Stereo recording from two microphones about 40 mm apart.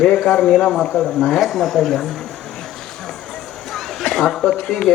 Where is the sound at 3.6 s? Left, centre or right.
Centre.